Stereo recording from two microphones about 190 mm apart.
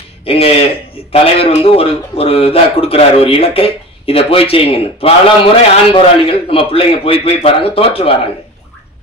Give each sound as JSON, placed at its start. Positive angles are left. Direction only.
{"t": 0.2, "sound": "a man's voice", "side_deg": 30}